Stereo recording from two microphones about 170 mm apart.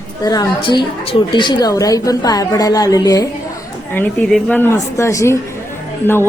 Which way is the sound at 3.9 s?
10° left (ahead or behind).